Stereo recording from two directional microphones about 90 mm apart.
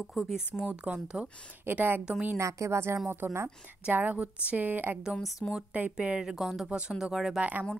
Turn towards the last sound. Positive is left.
turn(degrees=-15)  # may be behind; listen again after turning